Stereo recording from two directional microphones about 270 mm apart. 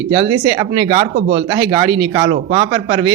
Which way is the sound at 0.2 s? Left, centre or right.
Centre.